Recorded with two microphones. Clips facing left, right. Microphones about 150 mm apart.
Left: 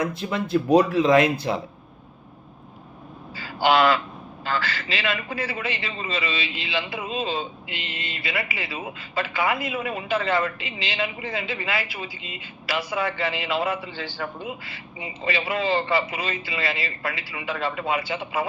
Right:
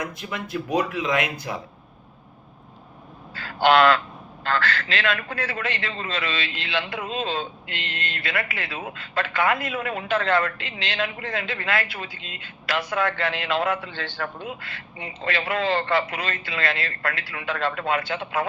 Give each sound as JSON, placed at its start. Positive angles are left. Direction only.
{"t": 0.0, "sound": "speech", "side_deg": 30}
{"t": 3.3, "sound": "a man's voice", "side_deg": 5}